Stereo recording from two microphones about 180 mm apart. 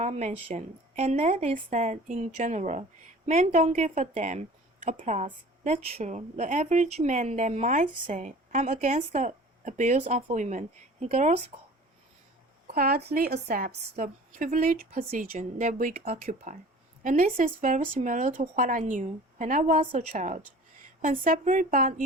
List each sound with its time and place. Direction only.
0.0 s a woman's voice: 40° right (ahead or behind)
12.6 s a woman's voice: 55° right (ahead or behind)